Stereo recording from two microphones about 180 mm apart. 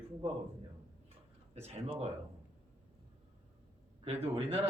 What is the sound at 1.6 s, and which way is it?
Speech, 35° right (ahead or behind).